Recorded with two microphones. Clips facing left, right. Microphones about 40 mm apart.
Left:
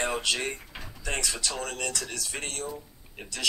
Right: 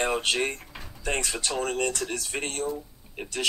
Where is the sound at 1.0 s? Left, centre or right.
Right.